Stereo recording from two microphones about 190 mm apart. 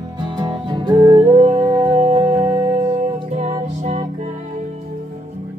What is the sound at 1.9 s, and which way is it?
Music, 35° right (ahead or behind).